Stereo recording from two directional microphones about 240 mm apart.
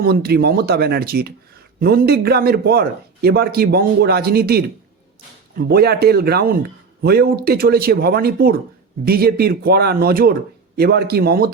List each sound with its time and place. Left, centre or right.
0.0 s speech: right